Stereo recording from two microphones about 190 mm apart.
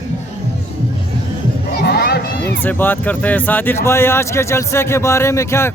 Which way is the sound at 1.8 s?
60° left (ahead or behind).